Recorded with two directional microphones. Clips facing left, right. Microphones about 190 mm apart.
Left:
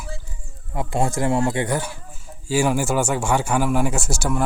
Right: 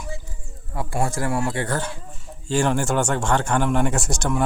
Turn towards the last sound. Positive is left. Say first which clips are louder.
# even
turn(degrees=5)  # may be behind; listen again after turning